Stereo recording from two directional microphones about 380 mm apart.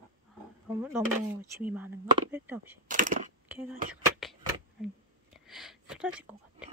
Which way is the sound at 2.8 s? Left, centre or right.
Right.